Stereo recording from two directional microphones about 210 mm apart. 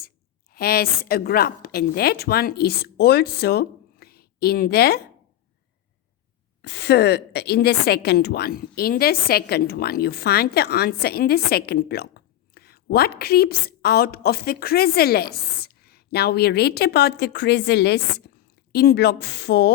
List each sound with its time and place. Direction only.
0.5 s a woman's voice: 45° left (ahead or behind)
6.6 s a woman's voice: 50° left (ahead or behind)